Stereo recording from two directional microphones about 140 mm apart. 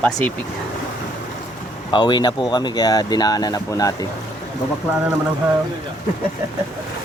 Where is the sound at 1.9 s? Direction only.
30° left (ahead or behind).